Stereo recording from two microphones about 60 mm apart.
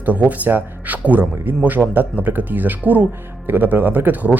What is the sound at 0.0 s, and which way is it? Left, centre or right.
Speech, right.